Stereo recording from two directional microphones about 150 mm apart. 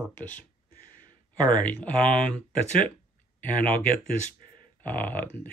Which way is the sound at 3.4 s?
10° left (ahead or behind).